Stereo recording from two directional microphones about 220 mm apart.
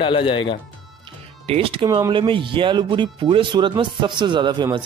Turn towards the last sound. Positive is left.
turn(degrees=-20)  # may be behind; listen again after turning